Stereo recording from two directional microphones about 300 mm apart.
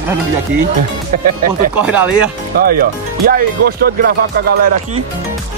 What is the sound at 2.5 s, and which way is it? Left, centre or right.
Speech, right.